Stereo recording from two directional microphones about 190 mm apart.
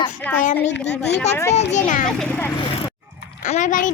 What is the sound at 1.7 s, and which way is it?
Child singing, 40° left (ahead or behind).